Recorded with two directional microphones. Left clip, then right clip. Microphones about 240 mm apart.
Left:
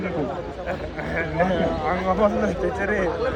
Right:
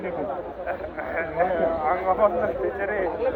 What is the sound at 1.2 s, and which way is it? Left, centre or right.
Speech, left.